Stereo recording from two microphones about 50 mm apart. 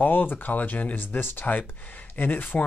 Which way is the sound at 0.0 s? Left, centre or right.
Left.